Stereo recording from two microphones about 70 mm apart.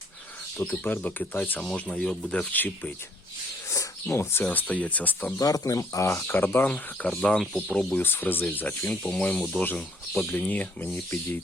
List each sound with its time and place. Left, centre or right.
0.5 s speech: left
1.7 s speech: centre
2.5 s speech: left
4.1 s speech: left
4.4 s speech: left
5.4 s speech: left
6.2 s speech: left
7.0 s speech: centre
7.9 s speech: left
8.8 s speech: centre